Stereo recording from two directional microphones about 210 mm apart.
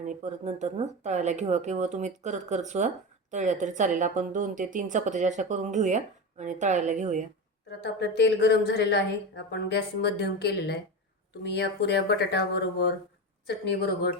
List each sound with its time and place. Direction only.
0.0 s speech: 35° right (ahead or behind)
7.7 s a woman's voice: 55° left (ahead or behind)
13.7 s speech: 55° left (ahead or behind)